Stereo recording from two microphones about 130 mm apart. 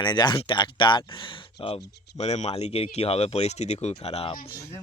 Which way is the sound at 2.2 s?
55° left (ahead or behind).